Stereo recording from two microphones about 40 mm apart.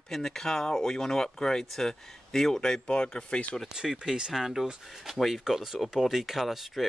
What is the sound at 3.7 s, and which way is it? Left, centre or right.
Speech, centre.